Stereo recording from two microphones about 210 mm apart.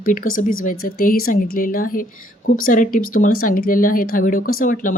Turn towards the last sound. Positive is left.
turn(degrees=40)  # may be behind; listen again after turning